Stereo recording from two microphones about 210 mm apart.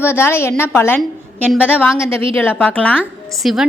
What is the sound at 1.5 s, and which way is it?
Speech, 5° right (ahead or behind).